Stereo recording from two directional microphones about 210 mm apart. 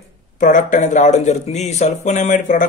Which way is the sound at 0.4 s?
35° left (ahead or behind).